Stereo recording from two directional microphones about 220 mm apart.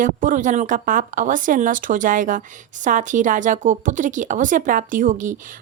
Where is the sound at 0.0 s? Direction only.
35° right (ahead or behind).